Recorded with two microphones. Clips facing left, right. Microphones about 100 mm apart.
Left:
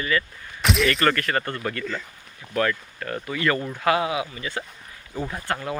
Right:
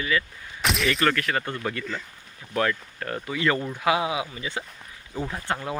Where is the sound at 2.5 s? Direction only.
25° right (ahead or behind).